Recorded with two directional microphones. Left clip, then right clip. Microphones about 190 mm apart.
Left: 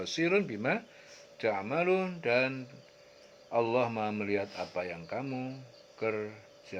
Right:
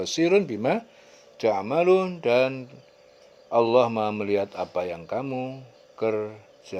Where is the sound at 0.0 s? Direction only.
45° right (ahead or behind).